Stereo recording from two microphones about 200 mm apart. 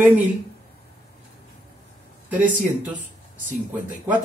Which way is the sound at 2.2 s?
10° right (ahead or behind).